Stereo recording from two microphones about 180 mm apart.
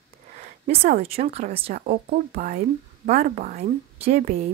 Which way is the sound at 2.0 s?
50° right (ahead or behind).